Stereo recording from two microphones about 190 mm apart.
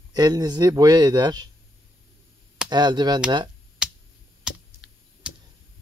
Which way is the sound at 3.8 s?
5° right (ahead or behind).